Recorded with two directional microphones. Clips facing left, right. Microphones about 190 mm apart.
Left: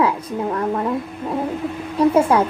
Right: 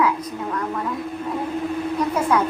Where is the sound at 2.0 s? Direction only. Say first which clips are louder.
Left 10 dB; 30° left (ahead or behind).